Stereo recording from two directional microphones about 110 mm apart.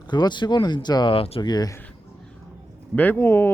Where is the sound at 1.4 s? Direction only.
40° left (ahead or behind).